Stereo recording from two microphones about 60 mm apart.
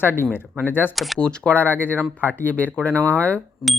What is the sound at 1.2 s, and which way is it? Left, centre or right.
Speech, centre.